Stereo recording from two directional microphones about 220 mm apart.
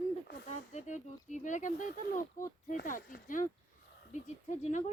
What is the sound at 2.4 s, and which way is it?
Speech, 15° left (ahead or behind).